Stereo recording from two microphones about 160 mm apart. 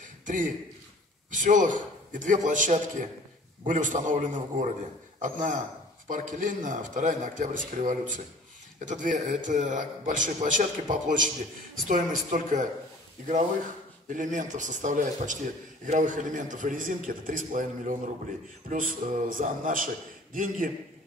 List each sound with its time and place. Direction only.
0.0 s a sound: 55° right (ahead or behind)
1.3 s a man's voice: 55° right (ahead or behind)
14.0 s a man's voice: 50° right (ahead or behind)